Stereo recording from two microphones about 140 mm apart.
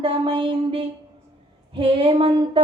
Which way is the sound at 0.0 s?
35° right (ahead or behind).